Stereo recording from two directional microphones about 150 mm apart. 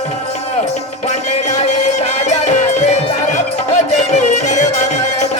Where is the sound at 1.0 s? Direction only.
50° left (ahead or behind).